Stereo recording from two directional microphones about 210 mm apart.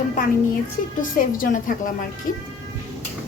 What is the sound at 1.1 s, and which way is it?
Speech, 40° left (ahead or behind).